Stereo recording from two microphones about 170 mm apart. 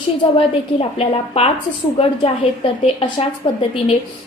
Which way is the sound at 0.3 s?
35° left (ahead or behind).